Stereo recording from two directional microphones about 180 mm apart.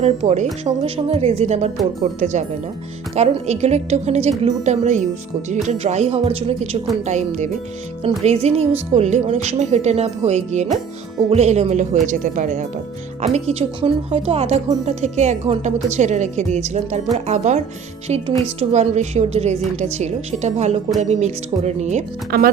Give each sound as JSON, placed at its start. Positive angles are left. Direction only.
{"t": 0.0, "sound": "a woman's voice", "side_deg": -40}
{"t": 3.2, "sound": "a woman's voice", "side_deg": -40}
{"t": 13.2, "sound": "a woman's voice", "side_deg": -35}
{"t": 22.3, "sound": "speech", "side_deg": -60}